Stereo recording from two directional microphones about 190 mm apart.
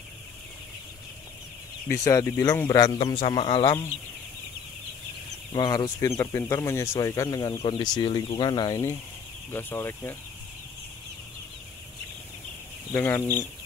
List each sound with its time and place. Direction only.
1.9 s speech: 15° left (ahead or behind)
5.5 s speech: 20° left (ahead or behind)
12.9 s speech: 15° left (ahead or behind)